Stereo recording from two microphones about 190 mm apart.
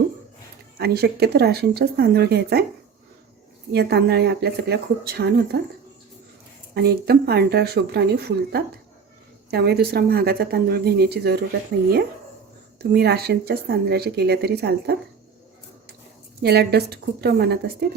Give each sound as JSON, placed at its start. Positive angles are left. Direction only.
{"t": 0.8, "sound": "speech", "side_deg": -55}
{"t": 3.7, "sound": "speech", "side_deg": -60}
{"t": 6.7, "sound": "speech", "side_deg": -55}
{"t": 12.8, "sound": "speech", "side_deg": -55}
{"t": 16.4, "sound": "speech", "side_deg": -60}